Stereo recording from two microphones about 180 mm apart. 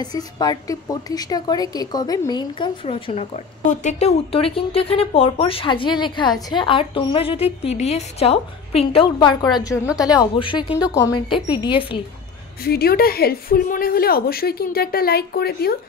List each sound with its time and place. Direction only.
0.0 s a woman's voice: 20° left (ahead or behind)
12.6 s a woman's voice: 60° left (ahead or behind)